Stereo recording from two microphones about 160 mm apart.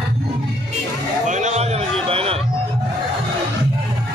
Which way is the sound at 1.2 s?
50° right (ahead or behind).